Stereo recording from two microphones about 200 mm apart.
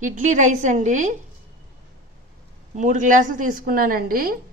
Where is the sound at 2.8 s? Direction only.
40° right (ahead or behind).